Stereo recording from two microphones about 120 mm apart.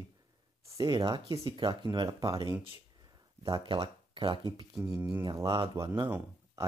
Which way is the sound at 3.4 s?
40° right (ahead or behind).